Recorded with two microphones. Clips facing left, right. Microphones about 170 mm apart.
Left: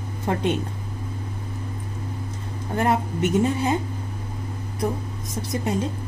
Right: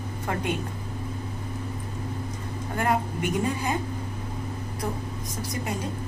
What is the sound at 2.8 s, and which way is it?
Speech, 25° left (ahead or behind).